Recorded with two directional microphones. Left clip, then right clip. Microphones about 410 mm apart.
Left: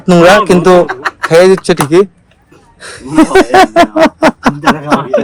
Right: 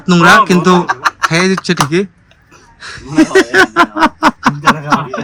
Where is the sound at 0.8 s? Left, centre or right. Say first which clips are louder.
Right 2 dB; centre.